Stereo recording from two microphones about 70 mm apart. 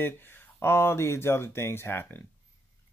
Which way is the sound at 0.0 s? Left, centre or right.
Left.